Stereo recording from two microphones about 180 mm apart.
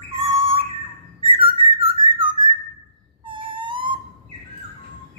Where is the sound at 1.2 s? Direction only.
30° right (ahead or behind).